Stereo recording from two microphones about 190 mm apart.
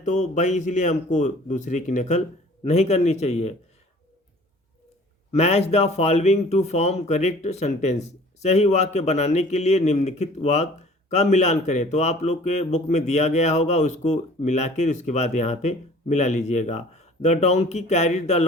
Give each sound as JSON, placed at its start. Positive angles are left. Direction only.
{"t": 0.0, "sound": "a man's voice", "side_deg": 40}
{"t": 5.3, "sound": "a man's voice", "side_deg": 35}